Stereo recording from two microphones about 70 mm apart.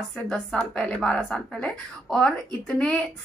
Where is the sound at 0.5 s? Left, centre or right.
Centre.